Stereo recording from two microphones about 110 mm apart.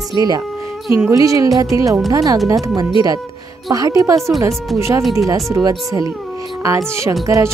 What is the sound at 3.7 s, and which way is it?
Speech, 35° right (ahead or behind).